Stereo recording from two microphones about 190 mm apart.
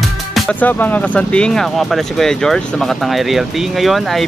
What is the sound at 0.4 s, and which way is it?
Speech, 5° left (ahead or behind).